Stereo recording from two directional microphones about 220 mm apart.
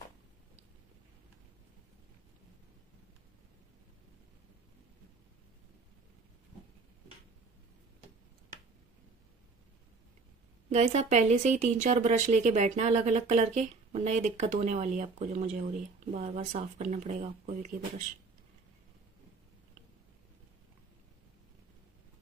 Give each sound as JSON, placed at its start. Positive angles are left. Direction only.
{"t": 10.7, "sound": "a woman's voice", "side_deg": -30}